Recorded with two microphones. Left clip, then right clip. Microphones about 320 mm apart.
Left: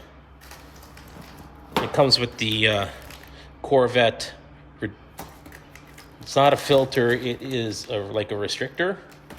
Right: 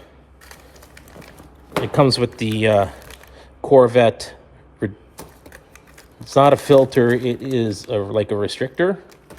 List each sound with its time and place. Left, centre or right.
2.0 s speech: centre
6.1 s speech: centre